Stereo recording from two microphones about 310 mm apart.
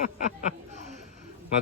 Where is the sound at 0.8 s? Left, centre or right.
Left.